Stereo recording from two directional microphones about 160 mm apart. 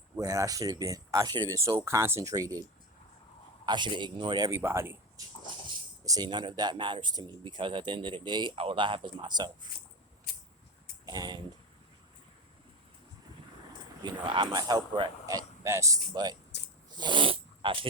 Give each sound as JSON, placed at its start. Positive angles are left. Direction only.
{"t": 0.2, "sound": "speech", "side_deg": -20}
{"t": 3.7, "sound": "speech", "side_deg": -30}
{"t": 11.0, "sound": "speech", "side_deg": -25}
{"t": 14.3, "sound": "speech", "side_deg": -25}
{"t": 16.5, "sound": "a sound", "side_deg": 90}
{"t": 17.0, "sound": "a sound", "side_deg": -30}